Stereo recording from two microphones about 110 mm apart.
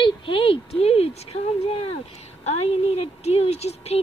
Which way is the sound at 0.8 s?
65° left (ahead or behind).